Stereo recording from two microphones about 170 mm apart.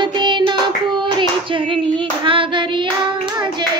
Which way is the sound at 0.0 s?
25° right (ahead or behind).